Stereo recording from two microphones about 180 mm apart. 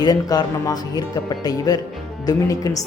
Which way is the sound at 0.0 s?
25° left (ahead or behind).